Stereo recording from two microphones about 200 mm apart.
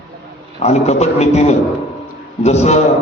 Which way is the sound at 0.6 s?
35° left (ahead or behind).